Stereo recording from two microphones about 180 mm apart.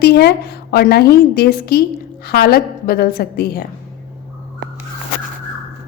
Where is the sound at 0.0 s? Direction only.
65° left (ahead or behind).